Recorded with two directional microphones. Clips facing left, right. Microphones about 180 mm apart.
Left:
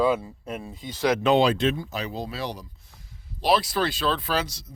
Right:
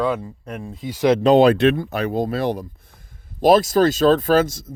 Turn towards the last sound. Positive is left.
turn(degrees=-50)  # may be behind; listen again after turning